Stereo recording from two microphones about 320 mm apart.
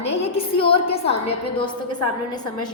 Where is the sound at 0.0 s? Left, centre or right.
Centre.